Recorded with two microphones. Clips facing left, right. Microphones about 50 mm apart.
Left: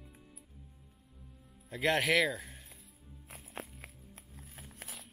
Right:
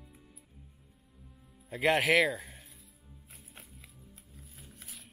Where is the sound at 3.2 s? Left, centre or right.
Left.